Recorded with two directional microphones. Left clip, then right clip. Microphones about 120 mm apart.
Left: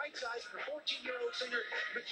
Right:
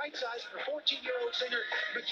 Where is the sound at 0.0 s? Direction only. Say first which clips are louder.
Right 4 dB; 35° right (ahead or behind).